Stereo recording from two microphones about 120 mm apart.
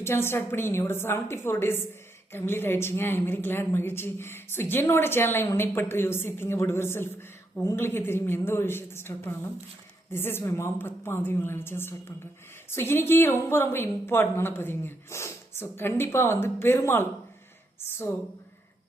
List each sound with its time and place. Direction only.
0.0 s a woman's voice: 20° left (ahead or behind)